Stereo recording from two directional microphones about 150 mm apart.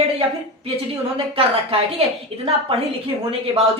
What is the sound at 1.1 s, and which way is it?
A woman's voice, 40° right (ahead or behind).